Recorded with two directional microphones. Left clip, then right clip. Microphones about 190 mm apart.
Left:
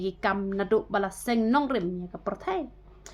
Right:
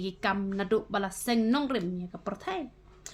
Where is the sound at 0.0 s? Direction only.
25° right (ahead or behind).